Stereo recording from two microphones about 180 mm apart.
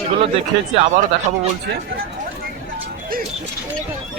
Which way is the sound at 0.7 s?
30° right (ahead or behind).